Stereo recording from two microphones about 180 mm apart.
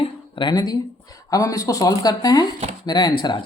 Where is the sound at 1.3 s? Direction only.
20° left (ahead or behind).